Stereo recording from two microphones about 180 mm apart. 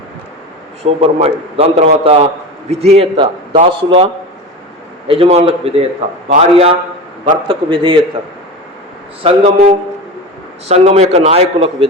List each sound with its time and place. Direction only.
0.9 s a man's voice: 35° right (ahead or behind)
9.2 s a man's voice: 35° right (ahead or behind)
10.7 s a man's voice: 40° right (ahead or behind)